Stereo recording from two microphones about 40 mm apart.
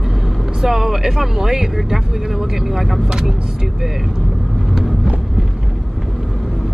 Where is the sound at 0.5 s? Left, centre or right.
Centre.